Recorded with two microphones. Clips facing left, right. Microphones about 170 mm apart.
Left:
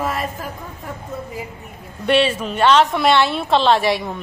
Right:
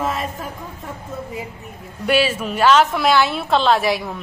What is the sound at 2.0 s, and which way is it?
A woman's voice, 5° right (ahead or behind).